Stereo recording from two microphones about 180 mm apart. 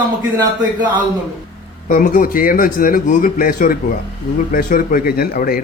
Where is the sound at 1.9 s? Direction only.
45° left (ahead or behind).